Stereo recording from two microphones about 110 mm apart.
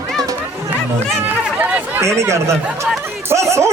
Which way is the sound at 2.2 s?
25° right (ahead or behind).